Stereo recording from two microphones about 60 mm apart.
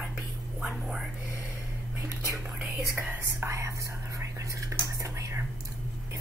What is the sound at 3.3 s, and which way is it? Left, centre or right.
Speech, right.